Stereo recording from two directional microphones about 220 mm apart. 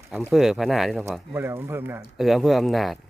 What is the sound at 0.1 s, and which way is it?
Speech, centre (ahead or behind).